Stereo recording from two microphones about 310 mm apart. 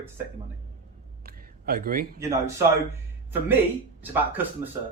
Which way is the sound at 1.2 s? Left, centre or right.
Right.